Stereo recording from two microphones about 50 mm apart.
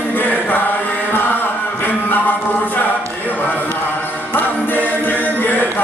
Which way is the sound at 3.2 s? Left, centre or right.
Left.